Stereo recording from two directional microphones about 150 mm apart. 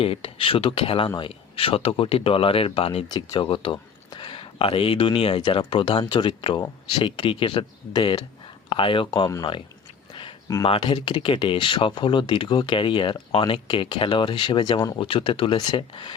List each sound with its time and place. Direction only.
0.0 s speech: 40° left (ahead or behind)
3.1 s speech: 30° left (ahead or behind)
10.1 s a sound: 35° left (ahead or behind)
10.6 s speech: 35° left (ahead or behind)